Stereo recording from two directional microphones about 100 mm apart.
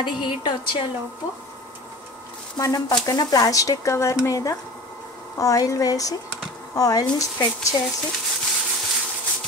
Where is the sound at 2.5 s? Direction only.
40° left (ahead or behind).